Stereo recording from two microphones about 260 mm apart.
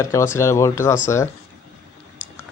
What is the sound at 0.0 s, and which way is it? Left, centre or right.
Speech, centre.